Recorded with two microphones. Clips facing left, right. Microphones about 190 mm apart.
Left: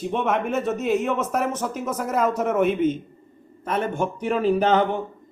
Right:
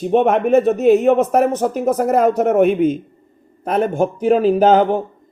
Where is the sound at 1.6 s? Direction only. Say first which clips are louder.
Right 10 dB; 60° right (ahead or behind).